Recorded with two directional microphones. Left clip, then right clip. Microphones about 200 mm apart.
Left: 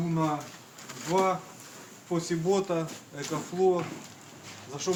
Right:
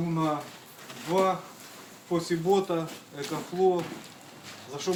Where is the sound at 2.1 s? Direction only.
15° left (ahead or behind).